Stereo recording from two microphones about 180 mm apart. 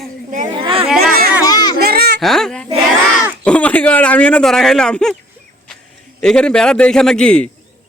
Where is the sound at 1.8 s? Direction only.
60° right (ahead or behind).